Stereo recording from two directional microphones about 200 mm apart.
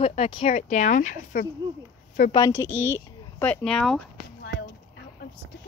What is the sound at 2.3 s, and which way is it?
Speech, 15° left (ahead or behind).